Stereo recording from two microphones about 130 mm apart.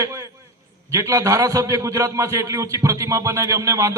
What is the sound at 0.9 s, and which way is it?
A man's voice, 25° right (ahead or behind).